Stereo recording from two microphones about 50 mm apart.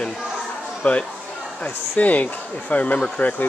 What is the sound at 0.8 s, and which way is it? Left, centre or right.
Speech, left.